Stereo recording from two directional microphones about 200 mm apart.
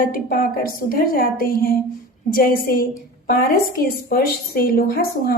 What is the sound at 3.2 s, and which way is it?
A woman's voice, 45° left (ahead or behind).